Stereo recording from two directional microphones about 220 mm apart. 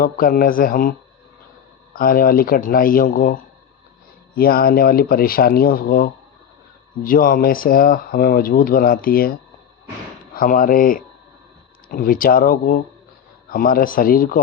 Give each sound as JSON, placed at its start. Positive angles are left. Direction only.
{"t": 0.0, "sound": "speech", "side_deg": 40}